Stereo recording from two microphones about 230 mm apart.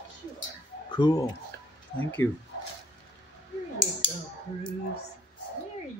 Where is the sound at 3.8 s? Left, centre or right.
Left.